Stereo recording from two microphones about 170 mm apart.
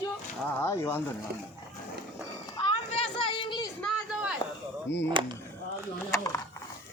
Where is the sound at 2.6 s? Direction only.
35° left (ahead or behind).